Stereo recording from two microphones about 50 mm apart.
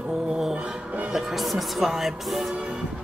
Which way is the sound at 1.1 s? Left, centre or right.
Centre.